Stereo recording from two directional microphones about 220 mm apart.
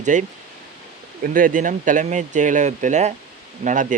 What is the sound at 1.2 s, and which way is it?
Speech, 40° right (ahead or behind).